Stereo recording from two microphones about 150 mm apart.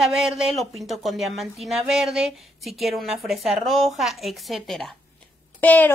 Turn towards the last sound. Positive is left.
turn(degrees=10)  # may be behind; listen again after turning